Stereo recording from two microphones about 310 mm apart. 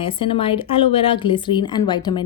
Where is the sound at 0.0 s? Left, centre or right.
Centre.